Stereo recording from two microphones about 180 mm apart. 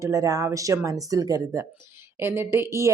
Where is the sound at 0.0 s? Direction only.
20° right (ahead or behind).